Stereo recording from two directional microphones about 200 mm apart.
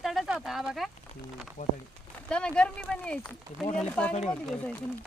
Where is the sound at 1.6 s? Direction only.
45° left (ahead or behind).